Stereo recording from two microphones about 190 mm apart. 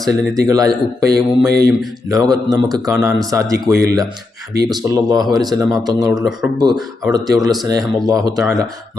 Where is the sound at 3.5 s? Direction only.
20° right (ahead or behind).